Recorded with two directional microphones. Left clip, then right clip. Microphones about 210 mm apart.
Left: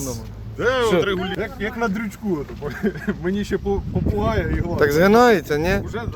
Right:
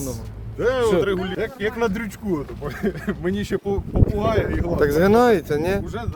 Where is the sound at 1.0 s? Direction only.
65° right (ahead or behind).